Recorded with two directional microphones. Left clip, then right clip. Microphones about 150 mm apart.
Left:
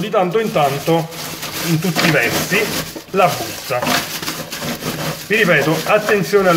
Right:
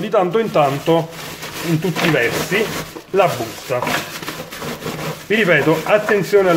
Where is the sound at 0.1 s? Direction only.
45° right (ahead or behind).